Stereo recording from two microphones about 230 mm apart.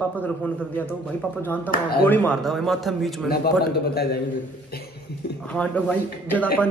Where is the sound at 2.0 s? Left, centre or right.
Centre.